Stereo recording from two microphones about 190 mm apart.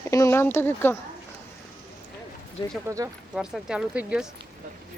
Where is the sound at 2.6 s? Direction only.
25° left (ahead or behind).